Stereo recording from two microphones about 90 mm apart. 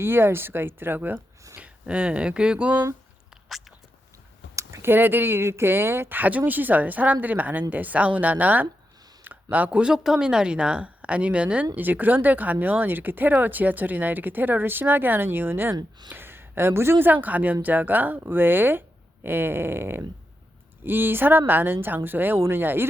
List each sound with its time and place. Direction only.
0.0 s speech: 25° right (ahead or behind)
4.5 s a woman's voice: 30° right (ahead or behind)